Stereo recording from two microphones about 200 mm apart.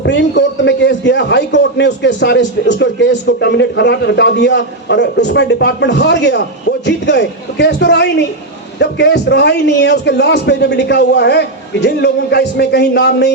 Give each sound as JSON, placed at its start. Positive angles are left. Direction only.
{"t": 0.0, "sound": "a man's voice", "side_deg": 60}